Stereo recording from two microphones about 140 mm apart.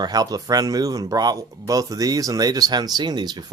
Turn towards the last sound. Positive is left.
turn(degrees=-30)  # may be behind; listen again after turning